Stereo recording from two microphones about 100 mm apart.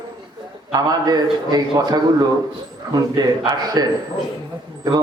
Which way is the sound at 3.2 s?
40° right (ahead or behind).